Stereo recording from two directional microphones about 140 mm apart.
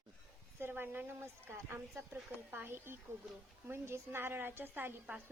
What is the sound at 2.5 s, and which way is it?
A woman's voice, 15° right (ahead or behind).